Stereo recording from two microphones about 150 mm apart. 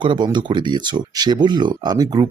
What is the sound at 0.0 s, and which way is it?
Speech, 30° right (ahead or behind).